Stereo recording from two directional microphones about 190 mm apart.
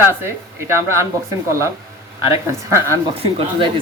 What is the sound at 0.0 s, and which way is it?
Speech, 10° right (ahead or behind).